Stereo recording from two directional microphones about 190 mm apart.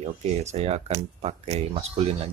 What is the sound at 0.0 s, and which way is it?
Speech, 35° right (ahead or behind).